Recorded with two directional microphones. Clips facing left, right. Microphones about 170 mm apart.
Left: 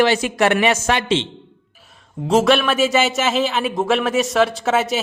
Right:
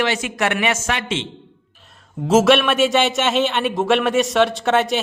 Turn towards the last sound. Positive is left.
turn(degrees=0)  # may be behind; listen again after turning